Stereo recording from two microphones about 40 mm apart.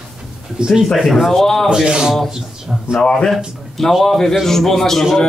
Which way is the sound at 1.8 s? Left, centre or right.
Right.